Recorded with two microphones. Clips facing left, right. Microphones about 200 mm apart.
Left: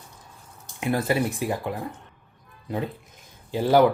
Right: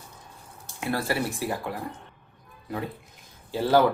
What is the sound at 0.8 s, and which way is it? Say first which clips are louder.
Speech: left 4 dB; 20° left (ahead or behind).